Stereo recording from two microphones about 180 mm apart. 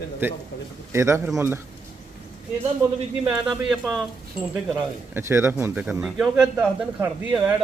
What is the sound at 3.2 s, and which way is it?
Speech, 5° right (ahead or behind).